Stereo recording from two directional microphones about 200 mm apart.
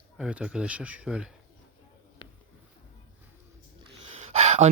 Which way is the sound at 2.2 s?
25° left (ahead or behind).